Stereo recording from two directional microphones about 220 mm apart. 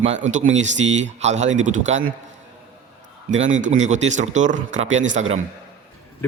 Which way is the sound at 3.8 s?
30° right (ahead or behind).